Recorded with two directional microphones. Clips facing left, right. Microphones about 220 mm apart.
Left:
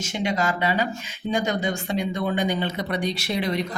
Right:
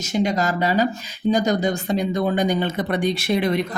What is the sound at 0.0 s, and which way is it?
Speech, 40° right (ahead or behind).